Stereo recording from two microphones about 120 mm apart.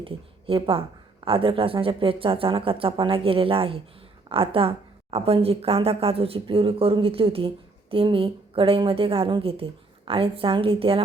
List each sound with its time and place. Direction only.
0.0 s speech: 50° right (ahead or behind)